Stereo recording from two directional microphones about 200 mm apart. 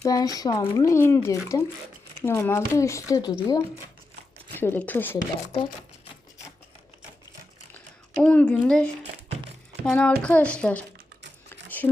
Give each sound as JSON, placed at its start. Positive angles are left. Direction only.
{"t": 0.0, "sound": "speech", "side_deg": 20}
{"t": 4.6, "sound": "speech", "side_deg": 10}
{"t": 8.2, "sound": "speech", "side_deg": 5}
{"t": 10.9, "sound": "typing", "side_deg": -60}